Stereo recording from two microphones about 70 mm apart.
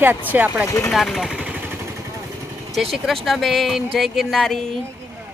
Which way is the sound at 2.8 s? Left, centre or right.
Centre.